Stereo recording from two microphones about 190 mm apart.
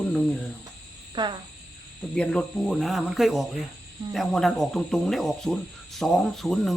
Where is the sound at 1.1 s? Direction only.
25° right (ahead or behind).